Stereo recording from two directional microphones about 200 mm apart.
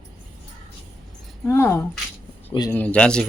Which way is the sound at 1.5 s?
15° left (ahead or behind).